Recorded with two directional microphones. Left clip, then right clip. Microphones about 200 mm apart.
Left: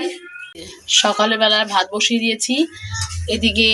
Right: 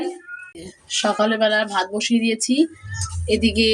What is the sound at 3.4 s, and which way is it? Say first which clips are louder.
Music: left 5 dB; 20° right (ahead or behind).